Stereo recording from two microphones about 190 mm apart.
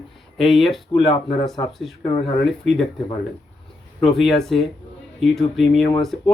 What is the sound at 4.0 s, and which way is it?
Speech, centre (ahead or behind).